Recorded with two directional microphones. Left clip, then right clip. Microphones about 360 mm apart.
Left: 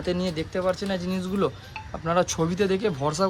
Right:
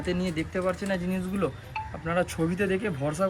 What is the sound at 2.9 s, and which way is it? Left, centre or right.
Speech, centre.